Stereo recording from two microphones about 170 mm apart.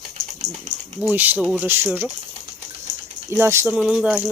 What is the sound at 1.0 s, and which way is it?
Speech, 10° right (ahead or behind).